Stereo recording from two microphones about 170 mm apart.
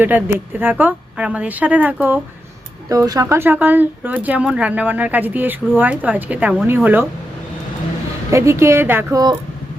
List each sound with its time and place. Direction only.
0.0 s speech: 10° right (ahead or behind)
2.9 s speech: 20° right (ahead or behind)
8.3 s speech: 15° right (ahead or behind)